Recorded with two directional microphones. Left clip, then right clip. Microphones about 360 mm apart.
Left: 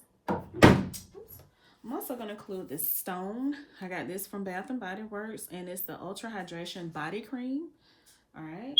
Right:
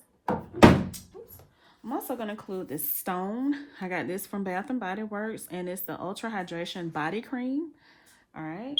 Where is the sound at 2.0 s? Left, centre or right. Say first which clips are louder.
Right 4 dB; right.